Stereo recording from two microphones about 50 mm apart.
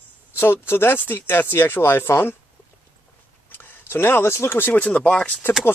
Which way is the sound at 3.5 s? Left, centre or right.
Left.